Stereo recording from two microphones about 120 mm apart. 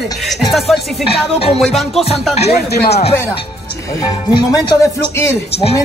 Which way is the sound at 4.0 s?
35° left (ahead or behind).